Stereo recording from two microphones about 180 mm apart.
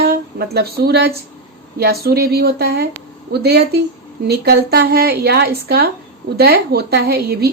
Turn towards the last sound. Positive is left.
turn(degrees=-60)  # may be behind; listen again after turning